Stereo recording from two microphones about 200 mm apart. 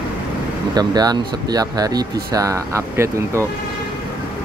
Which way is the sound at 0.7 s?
20° right (ahead or behind).